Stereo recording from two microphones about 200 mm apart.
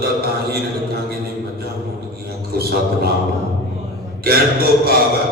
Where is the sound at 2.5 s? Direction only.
50° right (ahead or behind).